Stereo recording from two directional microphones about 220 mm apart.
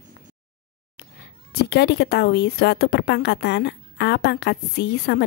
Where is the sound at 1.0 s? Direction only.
50° left (ahead or behind).